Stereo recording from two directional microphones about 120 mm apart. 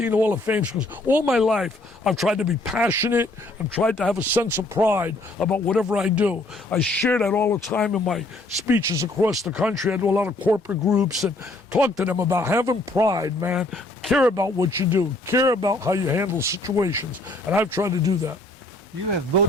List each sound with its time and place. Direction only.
0.0 s speech: 15° right (ahead or behind)
1.3 s speech: centre (ahead or behind)
2.9 s speech: 15° right (ahead or behind)
5.4 s speech: 10° left (ahead or behind)
5.7 s speech: 5° right (ahead or behind)
6.7 s speech: 15° left (ahead or behind)
7.9 s speech: centre (ahead or behind)
8.6 s speech: 20° right (ahead or behind)
9.4 s speech: 5° right (ahead or behind)
9.9 s speech: 15° right (ahead or behind)
10.8 s speech: 5° right (ahead or behind); by 13.5 s 30° right (ahead or behind)
13.5 s speech: 10° right (ahead or behind)
14.3 s speech: 30° right (ahead or behind)